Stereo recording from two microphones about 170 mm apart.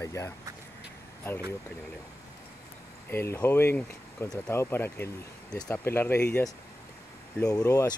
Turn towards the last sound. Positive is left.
turn(degrees=10)  # may be behind; listen again after turning